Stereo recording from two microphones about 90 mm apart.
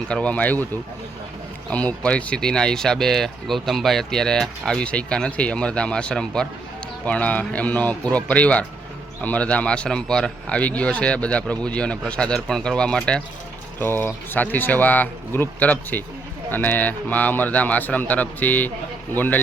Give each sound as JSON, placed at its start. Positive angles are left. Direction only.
{"t": 0.1, "sound": "speech", "side_deg": 15}
{"t": 1.7, "sound": "speech", "side_deg": 15}
{"t": 13.7, "sound": "speech", "side_deg": 25}